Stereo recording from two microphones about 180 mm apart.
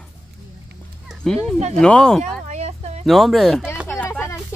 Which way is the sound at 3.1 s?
Centre (ahead or behind).